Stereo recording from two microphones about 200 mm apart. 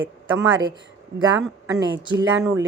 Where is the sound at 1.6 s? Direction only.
15° right (ahead or behind).